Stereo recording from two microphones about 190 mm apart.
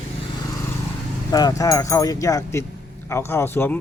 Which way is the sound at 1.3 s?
20° left (ahead or behind).